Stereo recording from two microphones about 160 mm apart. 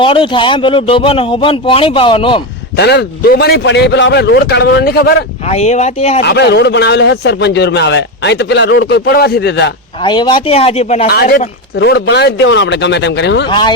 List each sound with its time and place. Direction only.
0.0 s a man's voice: 30° left (ahead or behind)
2.7 s a man's voice: 90° left
5.5 s a man's voice: 45° left (ahead or behind)
6.2 s a man's voice: 90° left
10.0 s a man's voice: 30° left (ahead or behind)
11.0 s speech: 70° left (ahead or behind)
11.9 s a man's voice: 90° left
13.5 s speech: 30° left (ahead or behind)